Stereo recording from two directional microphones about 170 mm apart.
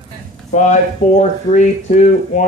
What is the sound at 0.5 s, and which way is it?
Speech, 45° left (ahead or behind).